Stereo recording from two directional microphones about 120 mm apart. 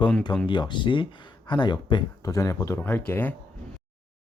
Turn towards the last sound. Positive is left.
turn(degrees=15)  # may be behind; listen again after turning